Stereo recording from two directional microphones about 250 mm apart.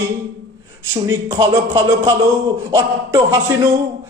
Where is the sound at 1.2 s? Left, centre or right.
Centre.